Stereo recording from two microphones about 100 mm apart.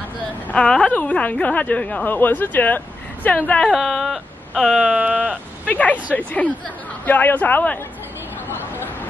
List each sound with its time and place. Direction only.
0.5 s a woman's voice: 10° left (ahead or behind)
3.7 s speech: centre (ahead or behind)
4.7 s sheep: 10° right (ahead or behind)
5.3 s a woman's voice: 15° left (ahead or behind)